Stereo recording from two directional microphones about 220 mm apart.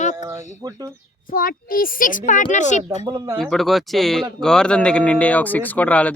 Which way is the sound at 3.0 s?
10° right (ahead or behind).